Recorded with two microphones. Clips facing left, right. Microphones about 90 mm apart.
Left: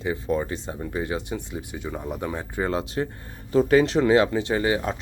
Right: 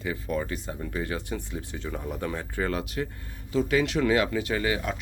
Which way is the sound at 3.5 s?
40° left (ahead or behind).